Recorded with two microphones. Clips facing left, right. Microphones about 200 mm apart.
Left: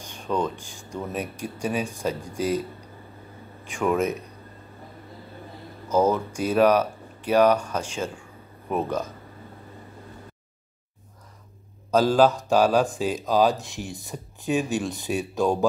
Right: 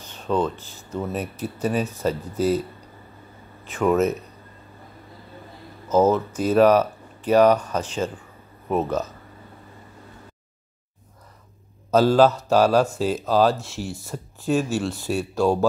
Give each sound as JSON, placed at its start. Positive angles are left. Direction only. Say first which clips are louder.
{"t": 0.0, "sound": "speech", "louder": "right 3 dB", "side_deg": 10}
{"t": 3.8, "sound": "speech", "louder": "right 4 dB", "side_deg": 10}
{"t": 6.0, "sound": "speech", "louder": "right 3 dB", "side_deg": 10}
{"t": 11.9, "sound": "speech", "louder": "right 2 dB", "side_deg": 10}